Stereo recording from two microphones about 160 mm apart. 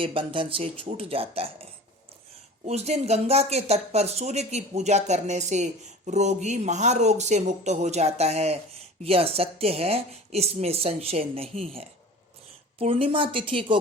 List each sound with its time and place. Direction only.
0.0 s speech: 35° right (ahead or behind)
2.6 s speech: 40° right (ahead or behind)